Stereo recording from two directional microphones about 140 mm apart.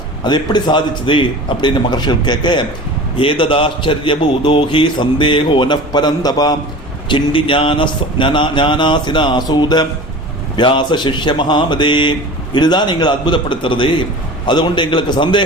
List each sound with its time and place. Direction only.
0.3 s a man's voice: 30° left (ahead or behind)